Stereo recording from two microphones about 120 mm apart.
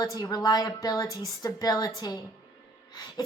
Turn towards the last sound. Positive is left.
turn(degrees=35)  # may be behind; listen again after turning